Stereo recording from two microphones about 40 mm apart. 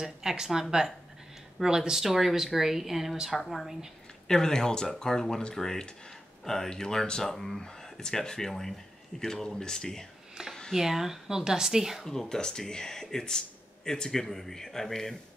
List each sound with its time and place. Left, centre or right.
0.0 s speech: centre
4.3 s speech: centre
10.7 s speech: centre
12.0 s speech: centre